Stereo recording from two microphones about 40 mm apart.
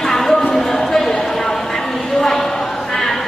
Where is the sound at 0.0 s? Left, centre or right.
Centre.